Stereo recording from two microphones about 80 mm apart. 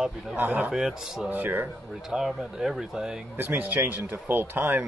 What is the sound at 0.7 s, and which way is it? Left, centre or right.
Speech, centre.